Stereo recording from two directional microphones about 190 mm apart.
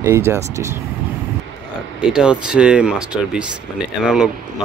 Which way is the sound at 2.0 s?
5° right (ahead or behind).